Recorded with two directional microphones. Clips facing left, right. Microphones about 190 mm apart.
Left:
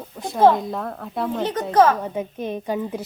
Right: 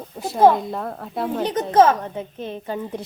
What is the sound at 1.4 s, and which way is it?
Speech, 15° right (ahead or behind).